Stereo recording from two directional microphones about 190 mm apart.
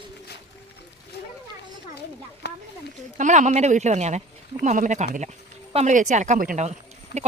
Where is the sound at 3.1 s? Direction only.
40° right (ahead or behind).